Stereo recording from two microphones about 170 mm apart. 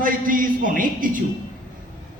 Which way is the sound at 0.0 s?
55° right (ahead or behind).